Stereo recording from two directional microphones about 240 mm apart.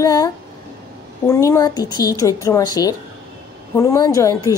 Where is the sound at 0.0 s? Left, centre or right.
Centre.